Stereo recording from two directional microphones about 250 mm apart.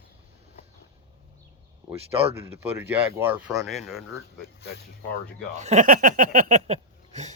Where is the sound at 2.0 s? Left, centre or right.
Right.